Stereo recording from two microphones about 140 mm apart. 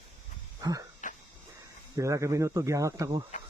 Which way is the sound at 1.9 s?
20° right (ahead or behind).